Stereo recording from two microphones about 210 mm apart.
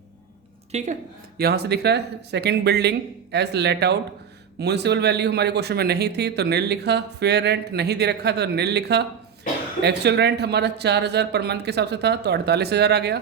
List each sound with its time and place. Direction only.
0.7 s a woman's voice: 35° right (ahead or behind)
1.4 s speech: 50° right (ahead or behind)